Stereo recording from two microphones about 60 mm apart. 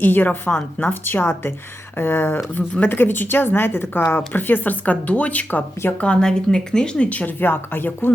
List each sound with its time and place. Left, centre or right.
0.0 s a woman's voice: left
3.0 s a woman's voice: left
6.0 s speech: centre; by 8.1 s left